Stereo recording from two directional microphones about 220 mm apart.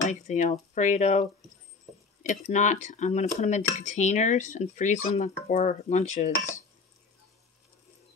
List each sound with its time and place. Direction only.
0.1 s speech: 35° left (ahead or behind)
2.4 s speech: 35° left (ahead or behind)